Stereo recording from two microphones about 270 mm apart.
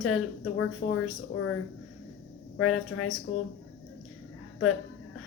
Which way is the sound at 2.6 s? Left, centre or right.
Left.